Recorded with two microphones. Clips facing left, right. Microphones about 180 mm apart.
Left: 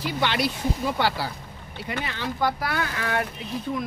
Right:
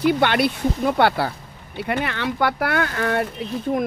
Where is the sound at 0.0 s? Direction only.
55° right (ahead or behind).